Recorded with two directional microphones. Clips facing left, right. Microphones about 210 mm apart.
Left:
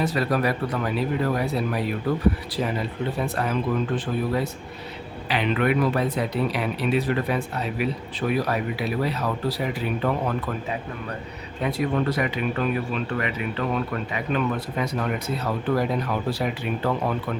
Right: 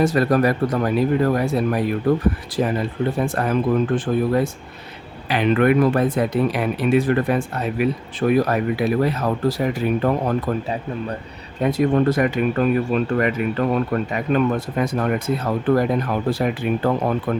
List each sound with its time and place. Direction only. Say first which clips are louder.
0.0 s speech: right 6 dB; 45° right (ahead or behind)